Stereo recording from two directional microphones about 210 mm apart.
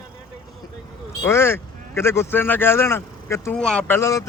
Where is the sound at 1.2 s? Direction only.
10° left (ahead or behind).